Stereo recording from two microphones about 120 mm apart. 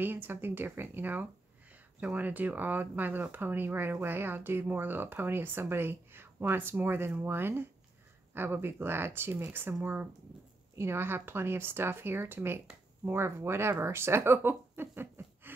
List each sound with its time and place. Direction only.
0.0 s speech: 15° right (ahead or behind)